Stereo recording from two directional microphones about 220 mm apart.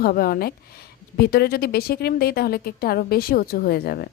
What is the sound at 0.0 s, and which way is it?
A woman's voice, 45° left (ahead or behind).